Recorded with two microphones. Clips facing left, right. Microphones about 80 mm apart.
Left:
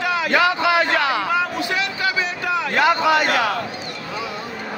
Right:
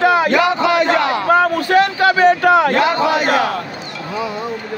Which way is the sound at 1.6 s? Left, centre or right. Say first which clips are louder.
Right 10 dB; right.